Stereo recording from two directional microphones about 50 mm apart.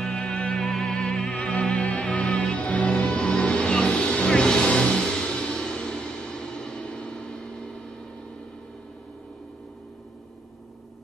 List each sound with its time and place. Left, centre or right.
0.0 s music: centre